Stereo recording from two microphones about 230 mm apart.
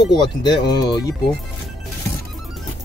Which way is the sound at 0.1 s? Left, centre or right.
Centre.